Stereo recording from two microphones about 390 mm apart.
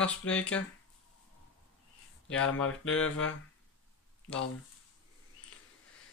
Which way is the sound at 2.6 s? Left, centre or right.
Left.